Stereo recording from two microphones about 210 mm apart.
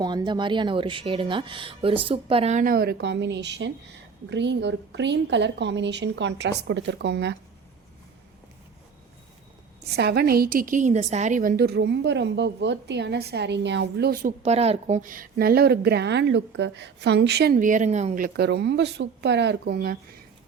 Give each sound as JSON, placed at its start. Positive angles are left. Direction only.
{"t": 0.0, "sound": "a woman's voice", "side_deg": -20}
{"t": 9.8, "sound": "a woman's voice", "side_deg": -50}